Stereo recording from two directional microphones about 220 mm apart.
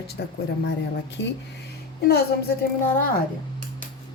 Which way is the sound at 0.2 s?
50° left (ahead or behind).